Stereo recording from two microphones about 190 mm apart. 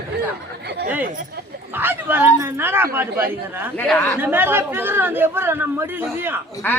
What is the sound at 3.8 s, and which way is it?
Speech, 5° left (ahead or behind).